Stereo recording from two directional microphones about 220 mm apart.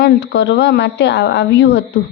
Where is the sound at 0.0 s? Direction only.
50° left (ahead or behind).